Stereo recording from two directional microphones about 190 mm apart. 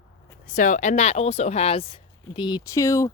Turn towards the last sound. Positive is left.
turn(degrees=15)  # may be behind; listen again after turning